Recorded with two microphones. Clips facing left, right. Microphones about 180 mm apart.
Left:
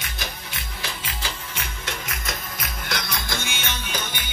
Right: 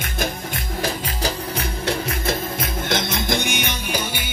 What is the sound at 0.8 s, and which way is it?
Music, 40° right (ahead or behind).